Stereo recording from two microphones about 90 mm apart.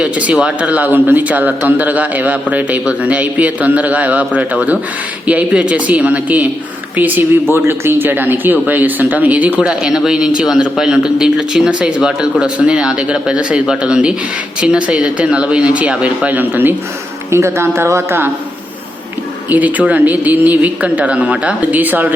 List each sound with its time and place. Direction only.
0.0 s speech: 10° right (ahead or behind); by 18.3 s 30° right (ahead or behind)
19.5 s speech: 15° right (ahead or behind)